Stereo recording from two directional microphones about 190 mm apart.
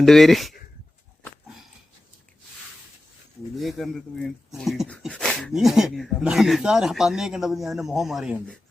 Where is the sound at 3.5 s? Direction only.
Centre (ahead or behind).